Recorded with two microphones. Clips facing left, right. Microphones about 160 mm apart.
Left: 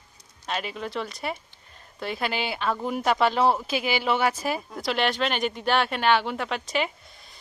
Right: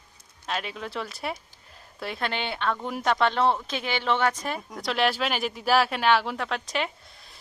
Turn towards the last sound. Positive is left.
turn(degrees=0)  # may be behind; listen again after turning